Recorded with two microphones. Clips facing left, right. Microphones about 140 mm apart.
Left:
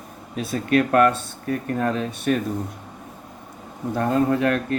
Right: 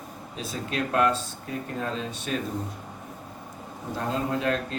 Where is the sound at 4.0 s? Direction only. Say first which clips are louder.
Left 8 dB; 60° left (ahead or behind).